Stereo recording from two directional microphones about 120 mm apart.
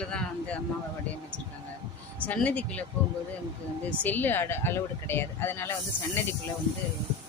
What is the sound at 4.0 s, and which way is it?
A woman's voice, 15° left (ahead or behind).